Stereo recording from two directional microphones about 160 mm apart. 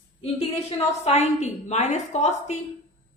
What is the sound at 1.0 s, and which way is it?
A woman's voice, 45° left (ahead or behind).